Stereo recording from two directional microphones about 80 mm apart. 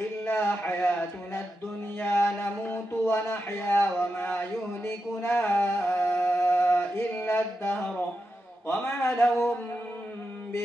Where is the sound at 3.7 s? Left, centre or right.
Left.